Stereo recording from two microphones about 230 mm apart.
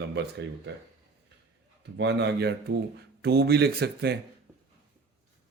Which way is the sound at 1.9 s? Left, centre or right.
Right.